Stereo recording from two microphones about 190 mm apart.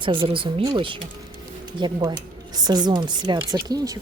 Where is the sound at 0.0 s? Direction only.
25° right (ahead or behind).